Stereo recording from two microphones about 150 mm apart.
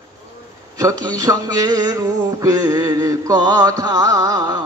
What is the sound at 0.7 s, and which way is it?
A man's voice, 25° right (ahead or behind).